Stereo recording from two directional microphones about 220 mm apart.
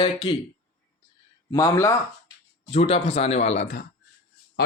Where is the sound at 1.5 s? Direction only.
15° left (ahead or behind).